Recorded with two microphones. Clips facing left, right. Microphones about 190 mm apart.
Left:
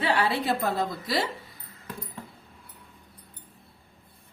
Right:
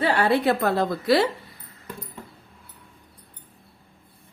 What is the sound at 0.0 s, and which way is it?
A woman's voice, 45° right (ahead or behind).